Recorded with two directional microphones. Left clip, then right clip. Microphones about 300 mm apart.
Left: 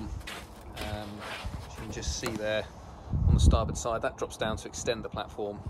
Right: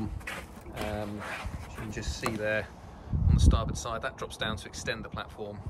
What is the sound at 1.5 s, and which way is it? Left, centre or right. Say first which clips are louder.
Speech: right 1 dB; centre.